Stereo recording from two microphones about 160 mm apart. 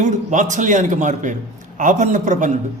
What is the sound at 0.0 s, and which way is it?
A man's voice, 50° right (ahead or behind).